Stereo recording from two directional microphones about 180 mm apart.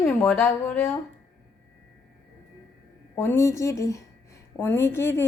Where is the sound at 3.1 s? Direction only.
15° left (ahead or behind).